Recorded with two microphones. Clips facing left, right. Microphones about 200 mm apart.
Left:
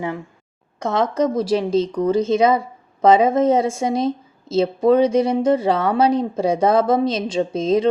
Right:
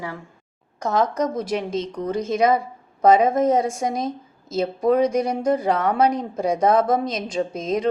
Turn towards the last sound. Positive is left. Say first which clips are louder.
# left 5 dB
turn(degrees=30)  # may be behind; listen again after turning